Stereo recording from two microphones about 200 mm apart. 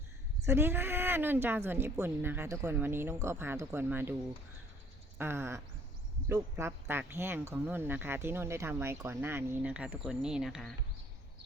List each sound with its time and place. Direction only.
0.4 s speech: 15° right (ahead or behind)
5.1 s speech: 10° right (ahead or behind)